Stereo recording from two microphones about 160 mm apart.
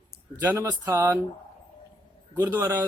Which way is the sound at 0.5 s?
20° right (ahead or behind).